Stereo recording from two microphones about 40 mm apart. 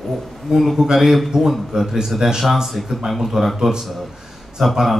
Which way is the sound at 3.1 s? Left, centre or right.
Centre.